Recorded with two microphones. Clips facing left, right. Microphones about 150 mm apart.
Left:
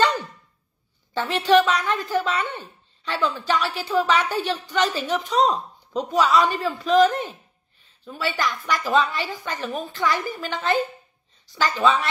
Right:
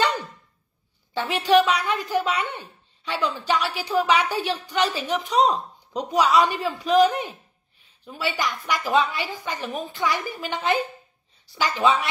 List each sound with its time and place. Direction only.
0.0 s dog: 10° right (ahead or behind)
1.1 s a woman's voice: 10° right (ahead or behind)